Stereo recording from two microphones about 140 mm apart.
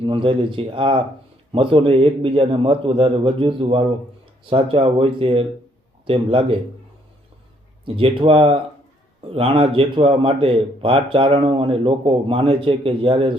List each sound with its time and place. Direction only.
0.0 s speech: 40° right (ahead or behind)
7.9 s speech: 40° right (ahead or behind)